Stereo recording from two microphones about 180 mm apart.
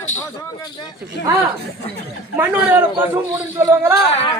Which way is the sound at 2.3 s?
10° right (ahead or behind).